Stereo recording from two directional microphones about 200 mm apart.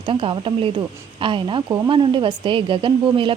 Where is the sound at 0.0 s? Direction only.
25° right (ahead or behind).